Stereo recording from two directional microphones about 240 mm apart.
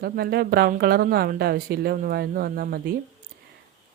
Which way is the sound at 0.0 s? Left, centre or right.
Right.